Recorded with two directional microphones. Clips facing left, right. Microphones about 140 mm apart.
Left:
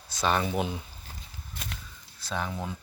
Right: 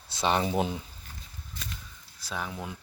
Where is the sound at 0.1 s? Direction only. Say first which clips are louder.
Right 1 dB; 25° right (ahead or behind).